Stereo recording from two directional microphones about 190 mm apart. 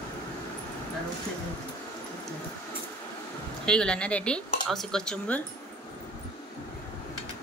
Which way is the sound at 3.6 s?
5° left (ahead or behind).